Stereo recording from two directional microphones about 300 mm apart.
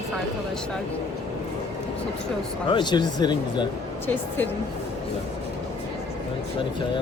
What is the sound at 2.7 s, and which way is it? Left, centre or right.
Speech, centre.